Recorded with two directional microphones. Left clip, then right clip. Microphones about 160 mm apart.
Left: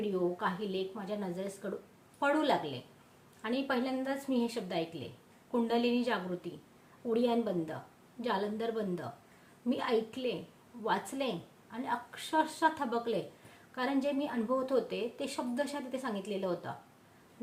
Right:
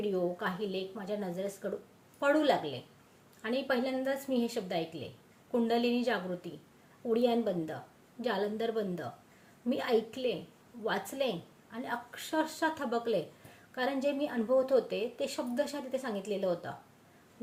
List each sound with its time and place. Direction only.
0.0 s a woman's voice: 15° left (ahead or behind)